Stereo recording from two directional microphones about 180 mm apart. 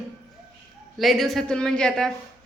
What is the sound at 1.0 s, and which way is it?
Speech, centre (ahead or behind).